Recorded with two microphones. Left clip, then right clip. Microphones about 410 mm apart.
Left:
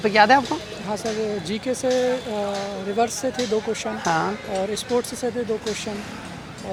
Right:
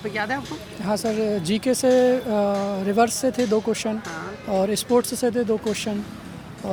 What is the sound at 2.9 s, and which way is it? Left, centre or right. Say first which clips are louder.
Speech: right 2 dB; right.